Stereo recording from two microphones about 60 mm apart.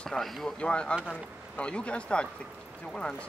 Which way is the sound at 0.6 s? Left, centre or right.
Centre.